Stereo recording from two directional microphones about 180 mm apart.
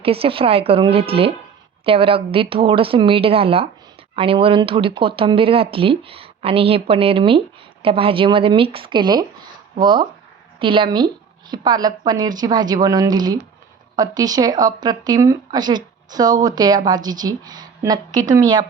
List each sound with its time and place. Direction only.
0.0 s speech: 30° right (ahead or behind)